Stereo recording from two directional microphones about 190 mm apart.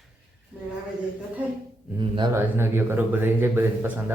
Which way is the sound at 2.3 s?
10° right (ahead or behind).